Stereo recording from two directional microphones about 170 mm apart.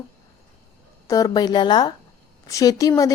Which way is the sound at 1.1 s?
20° left (ahead or behind).